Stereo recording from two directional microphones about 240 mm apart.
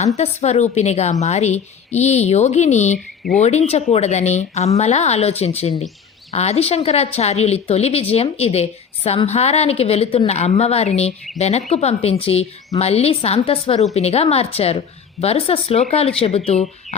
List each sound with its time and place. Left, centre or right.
0.2 s a woman's voice: left